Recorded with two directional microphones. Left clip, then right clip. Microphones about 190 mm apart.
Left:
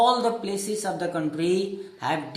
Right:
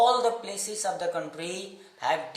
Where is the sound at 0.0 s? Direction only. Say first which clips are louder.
Left 1 dB; 15° right (ahead or behind).